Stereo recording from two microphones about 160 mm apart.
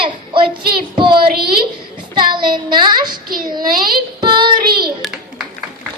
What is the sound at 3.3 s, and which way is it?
Speech, 65° right (ahead or behind).